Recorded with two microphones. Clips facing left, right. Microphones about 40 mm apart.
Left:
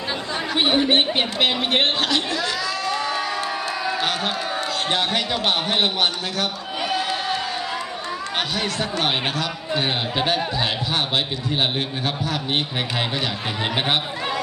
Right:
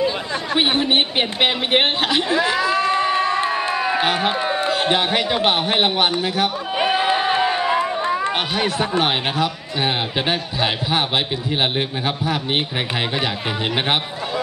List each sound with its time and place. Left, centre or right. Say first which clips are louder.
0.6 s a man's voice: even; centre
6.8 s crowd: right 6 dB; right
8.5 s speech: right 5 dB; centre